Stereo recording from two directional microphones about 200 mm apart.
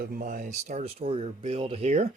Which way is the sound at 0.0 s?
45° right (ahead or behind).